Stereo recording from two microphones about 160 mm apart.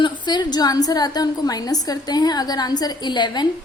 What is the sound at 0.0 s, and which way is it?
A woman's voice, 25° left (ahead or behind).